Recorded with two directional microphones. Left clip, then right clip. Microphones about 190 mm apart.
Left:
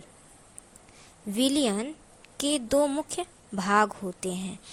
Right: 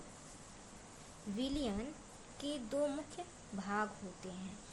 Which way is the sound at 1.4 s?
50° left (ahead or behind).